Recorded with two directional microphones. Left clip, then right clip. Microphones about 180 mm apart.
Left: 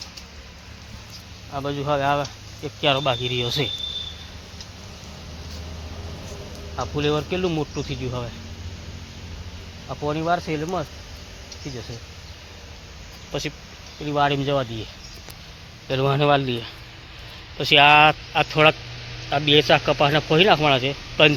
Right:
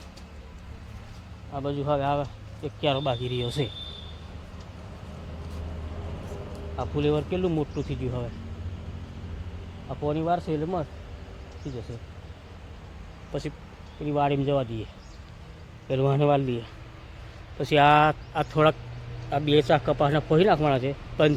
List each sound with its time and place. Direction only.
1.5 s speech: 30° left (ahead or behind)
6.7 s speech: 25° left (ahead or behind)
9.9 s speech: 25° left (ahead or behind)
13.3 s speech: 20° left (ahead or behind)
15.9 s speech: 10° left (ahead or behind)